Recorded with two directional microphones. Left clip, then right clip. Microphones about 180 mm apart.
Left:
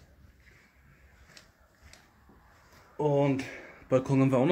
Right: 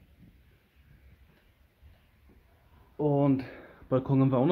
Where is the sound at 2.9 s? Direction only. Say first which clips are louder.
Even; 20° right (ahead or behind).